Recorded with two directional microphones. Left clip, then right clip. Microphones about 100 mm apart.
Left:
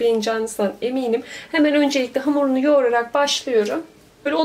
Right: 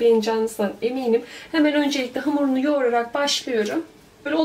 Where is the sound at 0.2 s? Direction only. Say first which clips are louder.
Left 1 dB; 35° left (ahead or behind).